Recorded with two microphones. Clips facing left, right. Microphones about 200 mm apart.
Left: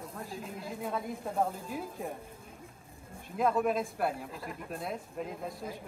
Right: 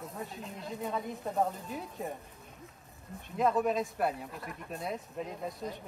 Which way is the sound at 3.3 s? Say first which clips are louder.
Even; centre (ahead or behind).